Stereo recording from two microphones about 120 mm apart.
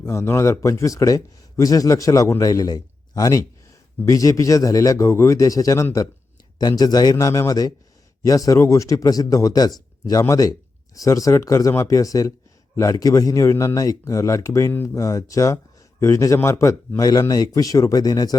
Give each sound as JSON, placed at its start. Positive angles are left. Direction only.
{"t": 0.0, "sound": "a man's voice", "side_deg": 20}